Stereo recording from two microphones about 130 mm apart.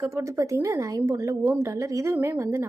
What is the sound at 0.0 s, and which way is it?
A woman's voice, 20° right (ahead or behind).